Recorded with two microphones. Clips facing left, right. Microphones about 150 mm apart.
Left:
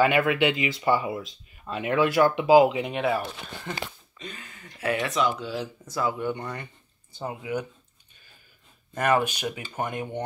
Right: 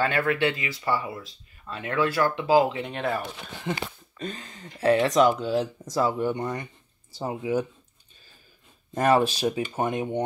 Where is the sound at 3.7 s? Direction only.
10° right (ahead or behind).